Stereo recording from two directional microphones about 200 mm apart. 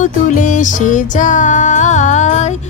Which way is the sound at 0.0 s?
40° left (ahead or behind).